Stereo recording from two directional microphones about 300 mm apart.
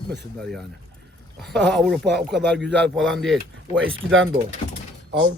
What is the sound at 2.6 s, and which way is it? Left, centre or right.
Speech, right.